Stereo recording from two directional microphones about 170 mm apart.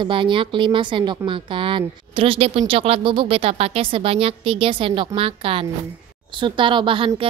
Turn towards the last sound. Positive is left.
turn(degrees=-30)  # may be behind; listen again after turning